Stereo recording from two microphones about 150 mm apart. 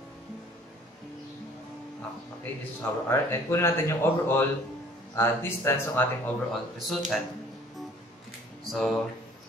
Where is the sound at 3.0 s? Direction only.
15° left (ahead or behind).